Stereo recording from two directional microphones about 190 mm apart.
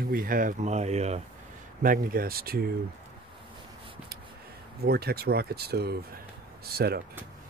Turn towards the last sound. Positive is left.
turn(degrees=-55)  # may be behind; listen again after turning